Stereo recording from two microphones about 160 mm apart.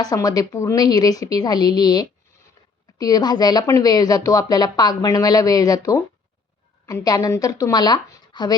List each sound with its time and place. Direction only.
0.0 s a woman's voice: 25° left (ahead or behind)